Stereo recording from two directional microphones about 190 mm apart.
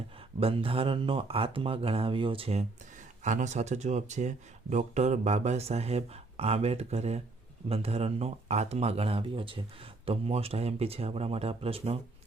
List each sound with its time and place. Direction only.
0.3 s speech: 30° right (ahead or behind)